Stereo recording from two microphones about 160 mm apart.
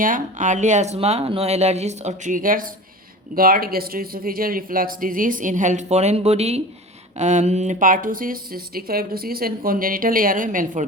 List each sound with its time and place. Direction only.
0.0 s speech: 55° right (ahead or behind)